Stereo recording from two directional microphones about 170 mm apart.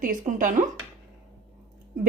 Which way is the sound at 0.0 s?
50° right (ahead or behind).